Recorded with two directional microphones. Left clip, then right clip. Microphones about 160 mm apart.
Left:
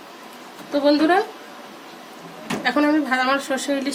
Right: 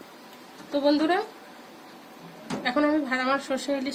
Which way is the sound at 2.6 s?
15° left (ahead or behind).